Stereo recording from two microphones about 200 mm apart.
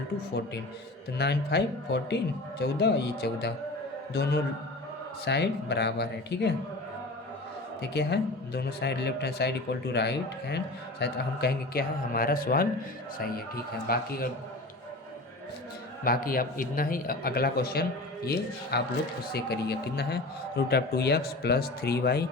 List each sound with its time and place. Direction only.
1.2 s speech: 55° left (ahead or behind)
7.8 s a man's voice: 55° left (ahead or behind)
13.8 s a man's voice: 50° left (ahead or behind)
16.0 s a man's voice: 45° left (ahead or behind)